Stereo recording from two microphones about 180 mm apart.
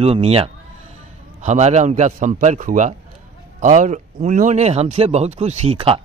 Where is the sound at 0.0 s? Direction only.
35° right (ahead or behind).